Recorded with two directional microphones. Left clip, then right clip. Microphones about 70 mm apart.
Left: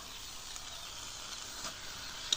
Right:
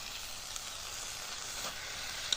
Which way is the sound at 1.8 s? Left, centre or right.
Right.